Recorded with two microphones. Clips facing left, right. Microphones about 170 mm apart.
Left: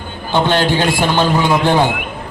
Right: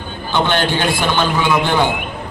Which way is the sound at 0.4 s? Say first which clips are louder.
Left 3 dB; 35° left (ahead or behind).